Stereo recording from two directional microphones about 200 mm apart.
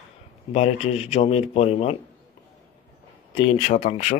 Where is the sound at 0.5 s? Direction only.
30° left (ahead or behind).